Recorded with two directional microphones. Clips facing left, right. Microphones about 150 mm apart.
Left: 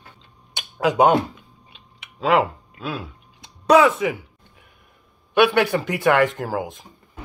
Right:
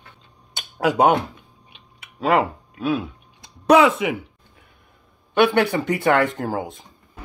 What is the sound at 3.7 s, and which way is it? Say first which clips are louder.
Speech: left 1 dB; 15° right (ahead or behind).